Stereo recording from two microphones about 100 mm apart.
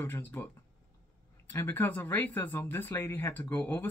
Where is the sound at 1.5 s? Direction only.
20° left (ahead or behind).